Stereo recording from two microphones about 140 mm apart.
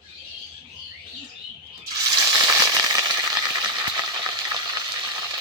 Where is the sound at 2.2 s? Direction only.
25° right (ahead or behind).